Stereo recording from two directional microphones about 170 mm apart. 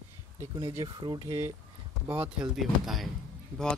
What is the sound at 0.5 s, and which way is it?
Speech, 20° right (ahead or behind).